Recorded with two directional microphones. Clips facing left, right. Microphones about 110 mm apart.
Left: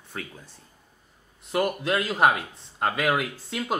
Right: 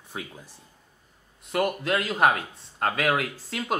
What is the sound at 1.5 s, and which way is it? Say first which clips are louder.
Speech: even; 5° left (ahead or behind).